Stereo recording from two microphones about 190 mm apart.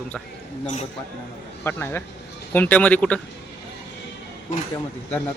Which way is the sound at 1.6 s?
10° left (ahead or behind).